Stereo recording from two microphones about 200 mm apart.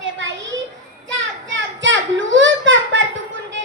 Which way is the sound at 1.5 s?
65° right (ahead or behind).